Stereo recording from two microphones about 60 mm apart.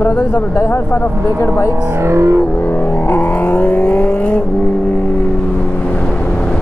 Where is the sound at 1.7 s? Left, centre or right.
Right.